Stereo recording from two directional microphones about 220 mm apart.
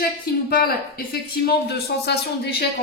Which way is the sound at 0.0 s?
45° left (ahead or behind).